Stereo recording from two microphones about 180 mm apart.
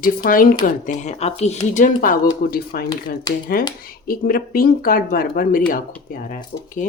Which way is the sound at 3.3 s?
20° left (ahead or behind).